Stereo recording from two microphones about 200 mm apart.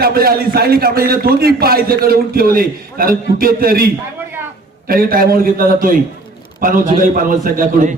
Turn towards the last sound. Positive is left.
turn(degrees=-40)  # may be behind; listen again after turning